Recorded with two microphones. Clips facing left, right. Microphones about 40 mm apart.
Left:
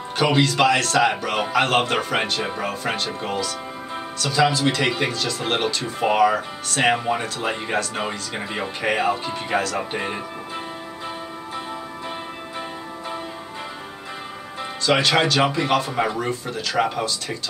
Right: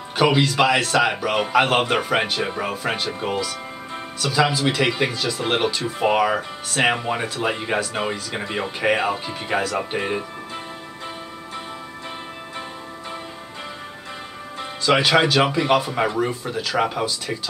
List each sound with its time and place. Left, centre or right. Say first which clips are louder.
0.2 s speech: right 1 dB; centre
14.6 s speech: right 1 dB; centre